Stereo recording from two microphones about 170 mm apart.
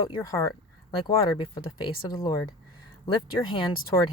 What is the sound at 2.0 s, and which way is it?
Speech, 25° left (ahead or behind).